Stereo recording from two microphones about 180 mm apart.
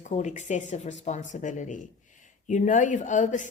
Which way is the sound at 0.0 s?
40° left (ahead or behind).